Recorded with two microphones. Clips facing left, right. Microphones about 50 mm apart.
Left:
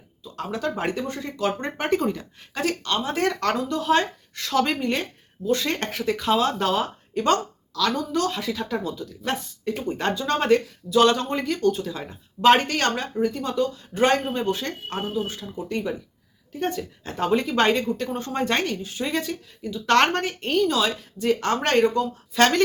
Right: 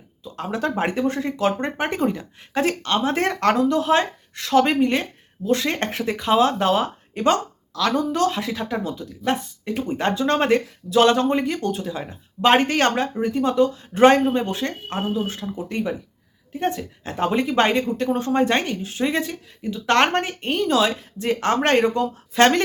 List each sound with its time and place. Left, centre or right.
0.3 s speech: right
1.6 s speech: centre
2.5 s speech: right
10.2 s speech: right
12.6 s speech: right
13.1 s speech: centre
15.5 s speech: centre
18.8 s speech: right
19.0 s speech: centre
20.6 s speech: right